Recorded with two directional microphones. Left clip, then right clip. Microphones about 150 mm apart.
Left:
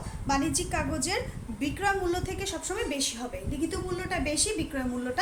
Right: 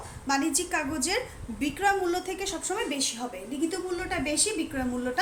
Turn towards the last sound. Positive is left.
turn(degrees=10)  # may be behind; listen again after turning